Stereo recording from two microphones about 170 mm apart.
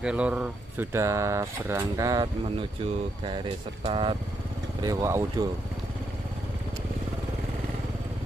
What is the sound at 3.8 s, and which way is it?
Speech, 30° right (ahead or behind).